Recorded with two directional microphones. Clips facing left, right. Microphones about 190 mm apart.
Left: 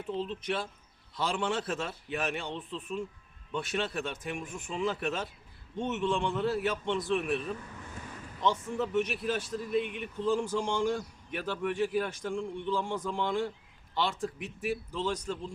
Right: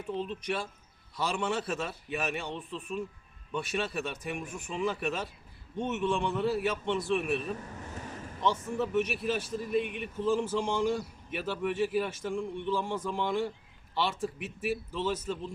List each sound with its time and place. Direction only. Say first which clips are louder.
0.1 s a man's voice: even; 10° right (ahead or behind)
2.5 s speech: even; 15° right (ahead or behind)
3.5 s a man's voice: even; centre (ahead or behind)
7.5 s vehicle: right 2 dB; 40° right (ahead or behind)
8.8 s a man's voice: right 1 dB; centre (ahead or behind)